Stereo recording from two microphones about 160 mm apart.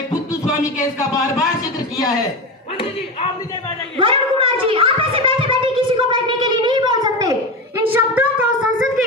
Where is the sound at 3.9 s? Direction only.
35° right (ahead or behind).